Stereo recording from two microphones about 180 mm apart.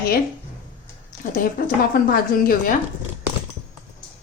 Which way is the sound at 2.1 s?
55° left (ahead or behind).